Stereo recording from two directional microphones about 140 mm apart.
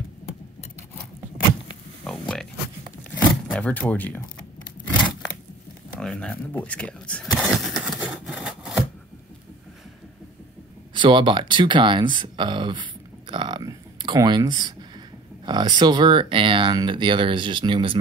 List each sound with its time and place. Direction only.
2.0 s speech: 5° left (ahead or behind)
3.0 s tearing: 10° left (ahead or behind)
5.9 s speech: 5° left (ahead or behind)
7.3 s a sound: centre (ahead or behind)
11.0 s speech: 35° right (ahead or behind)